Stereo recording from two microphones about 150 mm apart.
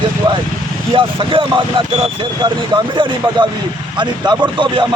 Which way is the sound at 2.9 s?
35° right (ahead or behind).